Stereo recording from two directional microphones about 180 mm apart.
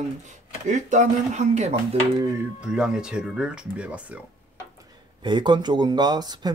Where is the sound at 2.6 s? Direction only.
5° right (ahead or behind).